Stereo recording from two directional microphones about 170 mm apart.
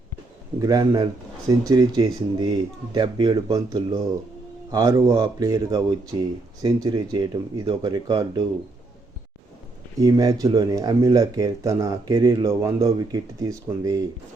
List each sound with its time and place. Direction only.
0.6 s speech: 20° right (ahead or behind)
10.0 s speech: 20° right (ahead or behind)